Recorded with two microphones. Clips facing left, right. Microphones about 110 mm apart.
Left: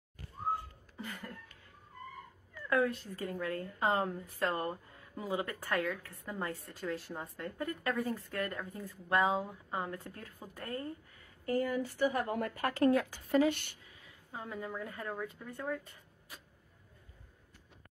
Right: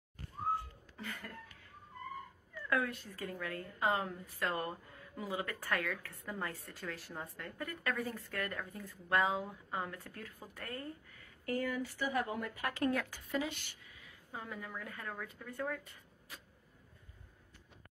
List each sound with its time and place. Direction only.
0.9 s a sound: 15° left (ahead or behind)
2.7 s a woman's voice: 30° left (ahead or behind)
11.5 s speech: 40° left (ahead or behind)
12.6 s speech: 40° left (ahead or behind)
13.3 s speech: 55° left (ahead or behind)
13.8 s a woman's voice: 30° left (ahead or behind)